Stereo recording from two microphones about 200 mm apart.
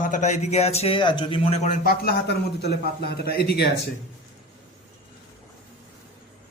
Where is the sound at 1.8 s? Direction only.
50° left (ahead or behind).